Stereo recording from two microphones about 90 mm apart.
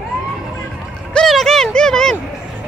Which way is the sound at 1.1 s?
5° left (ahead or behind).